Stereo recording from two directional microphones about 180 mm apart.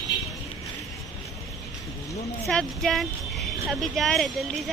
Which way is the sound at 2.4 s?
Centre (ahead or behind).